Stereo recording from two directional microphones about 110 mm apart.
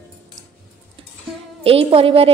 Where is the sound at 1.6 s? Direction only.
60° right (ahead or behind).